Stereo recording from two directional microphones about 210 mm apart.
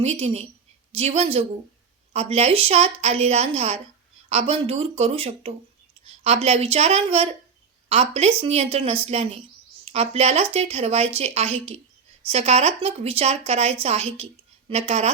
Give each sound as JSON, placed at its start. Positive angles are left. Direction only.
{"t": 0.0, "sound": "speech", "side_deg": -30}